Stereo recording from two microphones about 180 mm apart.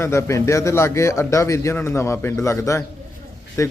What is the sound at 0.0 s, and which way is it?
A man's voice, 15° left (ahead or behind).